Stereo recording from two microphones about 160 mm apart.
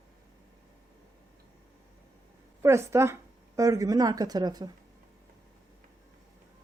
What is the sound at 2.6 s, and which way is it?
Speech, 15° right (ahead or behind).